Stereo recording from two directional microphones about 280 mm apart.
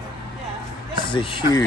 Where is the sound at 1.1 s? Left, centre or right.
Centre.